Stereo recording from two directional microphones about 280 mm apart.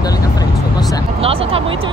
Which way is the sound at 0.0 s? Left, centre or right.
Centre.